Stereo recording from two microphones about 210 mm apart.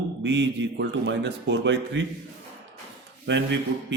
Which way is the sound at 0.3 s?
60° right (ahead or behind).